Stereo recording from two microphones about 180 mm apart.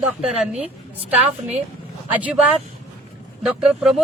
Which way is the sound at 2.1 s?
10° right (ahead or behind).